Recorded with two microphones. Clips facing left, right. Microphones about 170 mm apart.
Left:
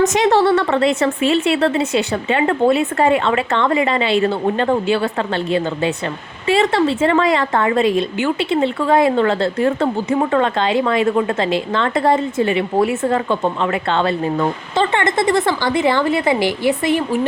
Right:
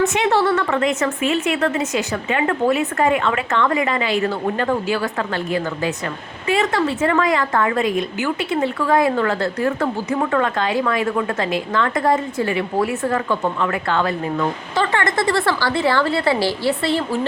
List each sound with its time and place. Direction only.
0.0 s speech: 40° left (ahead or behind); by 17.2 s 15° left (ahead or behind)